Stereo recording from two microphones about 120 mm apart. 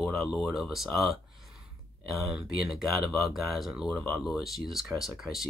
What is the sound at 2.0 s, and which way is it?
Speech, centre (ahead or behind).